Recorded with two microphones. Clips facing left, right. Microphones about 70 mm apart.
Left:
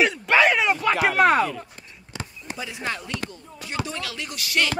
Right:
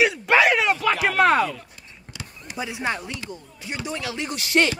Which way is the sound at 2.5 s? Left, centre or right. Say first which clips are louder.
Right 3 dB; right.